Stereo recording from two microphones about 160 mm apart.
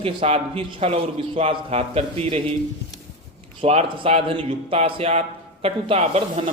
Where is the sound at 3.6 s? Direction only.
40° right (ahead or behind).